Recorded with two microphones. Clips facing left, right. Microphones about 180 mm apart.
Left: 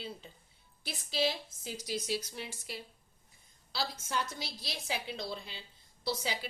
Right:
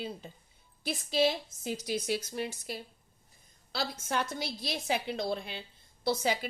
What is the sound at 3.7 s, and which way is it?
A woman's voice, 55° right (ahead or behind).